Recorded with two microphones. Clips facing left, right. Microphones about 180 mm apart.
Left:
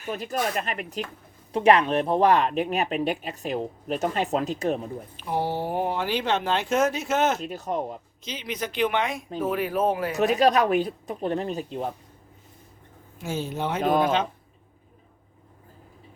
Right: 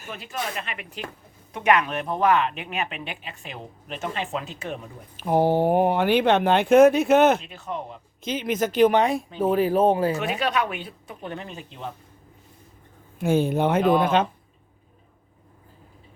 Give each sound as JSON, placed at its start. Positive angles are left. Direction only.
{"t": 0.1, "sound": "speech", "side_deg": 40}
{"t": 5.1, "sound": "speech", "side_deg": -50}
{"t": 7.3, "sound": "speech", "side_deg": 40}
{"t": 8.2, "sound": "a woman's voice", "side_deg": -50}
{"t": 10.2, "sound": "speech", "side_deg": 40}
{"t": 13.1, "sound": "speech", "side_deg": -60}